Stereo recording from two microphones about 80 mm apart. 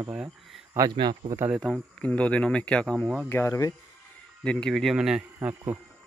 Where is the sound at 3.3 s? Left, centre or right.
Left.